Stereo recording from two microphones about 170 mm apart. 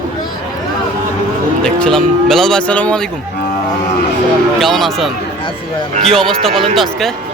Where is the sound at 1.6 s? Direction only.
5° left (ahead or behind).